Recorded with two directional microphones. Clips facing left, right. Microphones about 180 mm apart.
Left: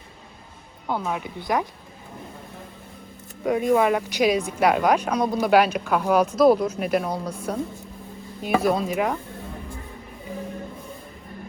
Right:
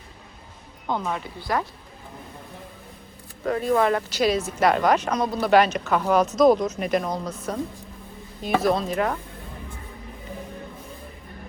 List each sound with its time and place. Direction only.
0.9 s speech: 5° left (ahead or behind)
1.4 s speech: 20° left (ahead or behind)
3.4 s speech: 15° left (ahead or behind)